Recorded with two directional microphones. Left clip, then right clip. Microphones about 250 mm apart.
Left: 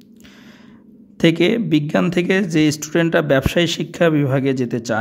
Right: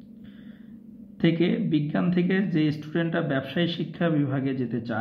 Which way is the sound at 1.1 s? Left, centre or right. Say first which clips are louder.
Left 9 dB; left.